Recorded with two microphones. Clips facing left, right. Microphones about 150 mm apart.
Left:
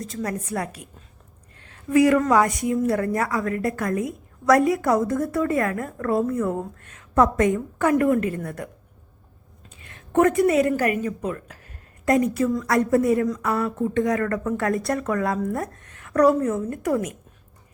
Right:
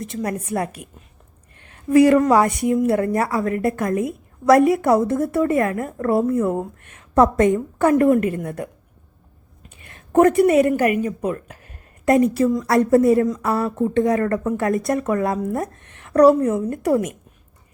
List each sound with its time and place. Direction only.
0.0 s a woman's voice: 25° right (ahead or behind)
1.9 s a woman's voice: 35° right (ahead or behind)
8.3 s a woman's voice: 25° right (ahead or behind)
9.9 s a woman's voice: 35° right (ahead or behind)
14.5 s a woman's voice: 20° right (ahead or behind); by 17.0 s 35° right (ahead or behind)